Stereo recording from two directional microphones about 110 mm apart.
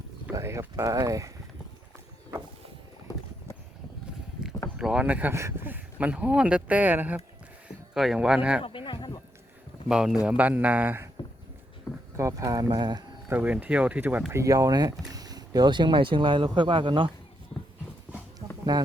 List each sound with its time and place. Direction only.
0.3 s speech: 25° right (ahead or behind)
4.8 s speech: 10° right (ahead or behind)
5.3 s speech: 25° right (ahead or behind)
7.9 s speech: 5° right (ahead or behind)
8.6 s a sound: 50° left (ahead or behind)
9.9 s speech: 5° right (ahead or behind)
12.1 s speech: 30° right (ahead or behind)
13.3 s speech: 15° right (ahead or behind)
14.4 s speech: 35° right (ahead or behind); by 17.1 s 50° right (ahead or behind)
18.3 s a sound: 40° right (ahead or behind)